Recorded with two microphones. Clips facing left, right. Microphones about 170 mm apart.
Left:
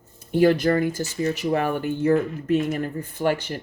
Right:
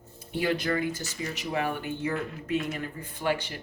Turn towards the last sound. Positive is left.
turn(degrees=45)  # may be behind; listen again after turning